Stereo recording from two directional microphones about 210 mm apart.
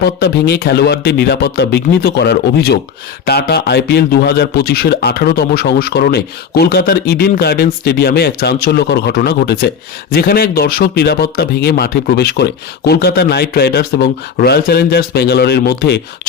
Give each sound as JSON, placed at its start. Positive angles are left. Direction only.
{"t": 0.0, "sound": "a man's voice", "side_deg": 50}